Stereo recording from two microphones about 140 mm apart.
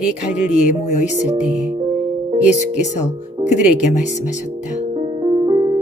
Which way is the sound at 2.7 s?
60° left (ahead or behind).